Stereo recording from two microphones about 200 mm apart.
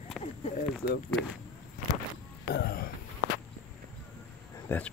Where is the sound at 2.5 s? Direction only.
50° left (ahead or behind).